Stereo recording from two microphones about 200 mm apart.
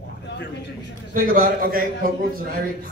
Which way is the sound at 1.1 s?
40° right (ahead or behind).